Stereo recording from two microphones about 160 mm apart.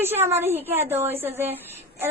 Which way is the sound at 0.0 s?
15° right (ahead or behind).